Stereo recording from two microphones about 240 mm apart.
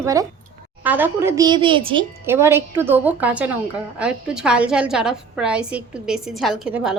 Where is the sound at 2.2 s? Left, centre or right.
Centre.